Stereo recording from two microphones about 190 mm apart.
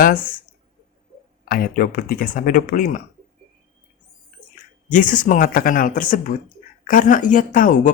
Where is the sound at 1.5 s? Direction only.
50° left (ahead or behind).